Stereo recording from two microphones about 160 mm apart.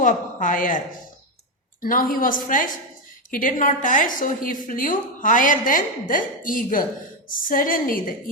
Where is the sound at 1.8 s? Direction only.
60° left (ahead or behind).